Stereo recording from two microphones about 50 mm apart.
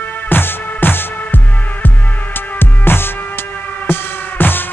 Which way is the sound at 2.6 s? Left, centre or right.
Left.